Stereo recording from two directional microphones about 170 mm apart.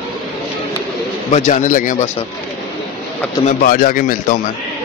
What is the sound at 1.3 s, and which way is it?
Speech, 45° left (ahead or behind).